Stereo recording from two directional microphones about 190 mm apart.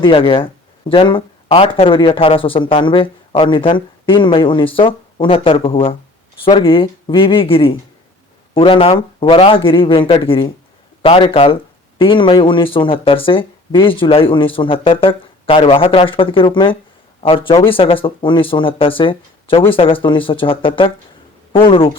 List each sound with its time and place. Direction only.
0.0 s speech: 25° left (ahead or behind)